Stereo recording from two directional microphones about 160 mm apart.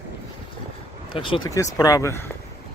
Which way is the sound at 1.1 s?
30° left (ahead or behind).